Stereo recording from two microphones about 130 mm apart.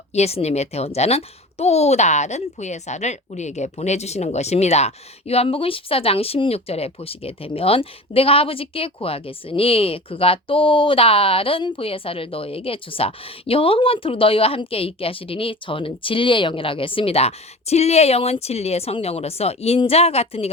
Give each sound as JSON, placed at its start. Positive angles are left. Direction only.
{"t": 0.1, "sound": "speech", "side_deg": 55}